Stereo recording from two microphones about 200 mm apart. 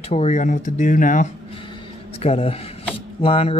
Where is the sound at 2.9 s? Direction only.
30° left (ahead or behind).